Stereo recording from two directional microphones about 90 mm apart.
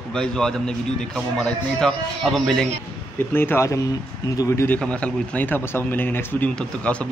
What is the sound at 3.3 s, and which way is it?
Speech, 25° left (ahead or behind).